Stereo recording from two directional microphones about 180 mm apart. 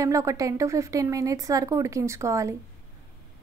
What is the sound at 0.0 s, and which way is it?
A woman's voice, 15° right (ahead or behind).